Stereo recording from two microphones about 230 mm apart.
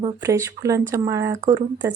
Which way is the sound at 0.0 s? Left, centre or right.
Centre.